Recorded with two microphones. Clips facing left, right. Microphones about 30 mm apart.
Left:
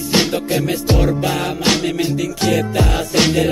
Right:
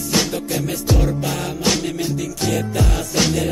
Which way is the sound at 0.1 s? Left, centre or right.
Left.